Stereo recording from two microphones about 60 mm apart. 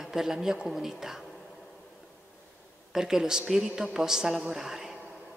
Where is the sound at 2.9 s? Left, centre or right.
Centre.